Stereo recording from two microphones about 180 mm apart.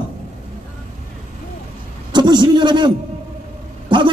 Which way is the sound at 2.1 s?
25° right (ahead or behind).